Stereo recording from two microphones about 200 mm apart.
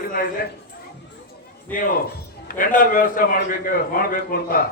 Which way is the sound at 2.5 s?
45° left (ahead or behind).